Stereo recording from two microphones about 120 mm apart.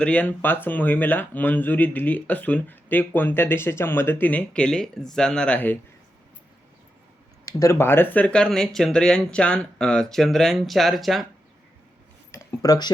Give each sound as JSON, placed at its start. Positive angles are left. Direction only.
{"t": 0.0, "sound": "speech", "side_deg": 10}
{"t": 7.6, "sound": "speech", "side_deg": 20}
{"t": 12.3, "sound": "a sound", "side_deg": 25}